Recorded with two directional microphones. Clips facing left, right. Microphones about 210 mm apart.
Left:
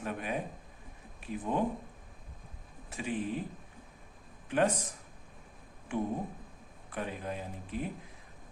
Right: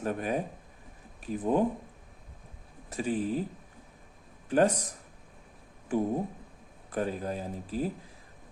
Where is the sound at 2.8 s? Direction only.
40° right (ahead or behind).